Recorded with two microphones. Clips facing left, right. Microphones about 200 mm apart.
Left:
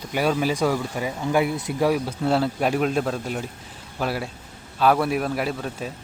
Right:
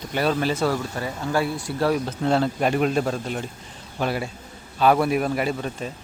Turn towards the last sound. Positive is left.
turn(degrees=0)  # may be behind; listen again after turning